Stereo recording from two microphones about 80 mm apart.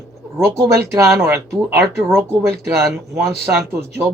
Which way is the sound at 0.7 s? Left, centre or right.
Right.